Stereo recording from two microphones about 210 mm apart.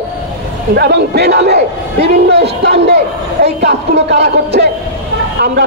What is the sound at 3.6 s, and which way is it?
Music, 55° right (ahead or behind).